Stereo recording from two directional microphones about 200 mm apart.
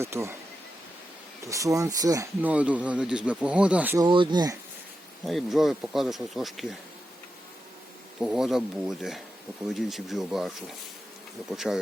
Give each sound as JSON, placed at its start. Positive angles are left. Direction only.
{"t": 0.0, "sound": "speech", "side_deg": -15}
{"t": 1.5, "sound": "speech", "side_deg": -15}
{"t": 4.0, "sound": "speech", "side_deg": -25}
{"t": 5.2, "sound": "speech", "side_deg": 0}
{"t": 8.2, "sound": "speech", "side_deg": 0}